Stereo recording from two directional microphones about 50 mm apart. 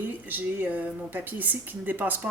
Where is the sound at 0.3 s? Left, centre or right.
Right.